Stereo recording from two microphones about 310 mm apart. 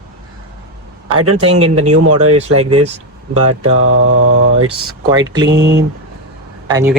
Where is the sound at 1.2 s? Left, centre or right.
Right.